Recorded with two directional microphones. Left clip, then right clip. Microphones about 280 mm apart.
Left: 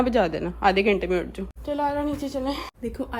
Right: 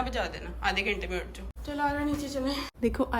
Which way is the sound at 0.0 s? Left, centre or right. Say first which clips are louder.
Left 10 dB; left.